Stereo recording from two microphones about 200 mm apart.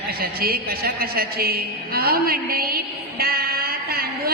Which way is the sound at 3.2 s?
50° right (ahead or behind).